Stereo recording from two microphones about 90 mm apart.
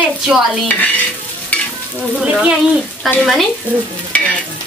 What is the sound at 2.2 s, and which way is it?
Speech, 5° right (ahead or behind).